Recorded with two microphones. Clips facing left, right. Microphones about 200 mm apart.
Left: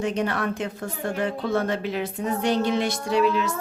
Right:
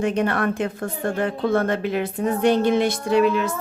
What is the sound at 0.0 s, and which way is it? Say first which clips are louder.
A woman's voice: right 4 dB; 55° right (ahead or behind).